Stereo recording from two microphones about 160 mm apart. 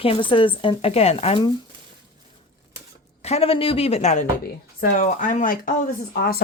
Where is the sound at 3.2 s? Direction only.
40° left (ahead or behind); by 5.8 s 60° left (ahead or behind).